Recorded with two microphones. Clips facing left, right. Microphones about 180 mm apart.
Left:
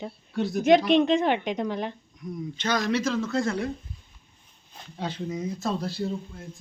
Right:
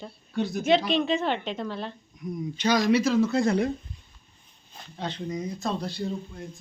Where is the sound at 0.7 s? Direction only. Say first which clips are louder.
Left 5 dB; 15° left (ahead or behind).